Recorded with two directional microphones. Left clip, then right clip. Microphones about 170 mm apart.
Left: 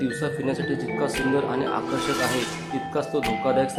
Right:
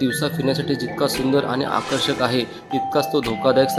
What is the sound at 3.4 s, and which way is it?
Speech, 35° right (ahead or behind).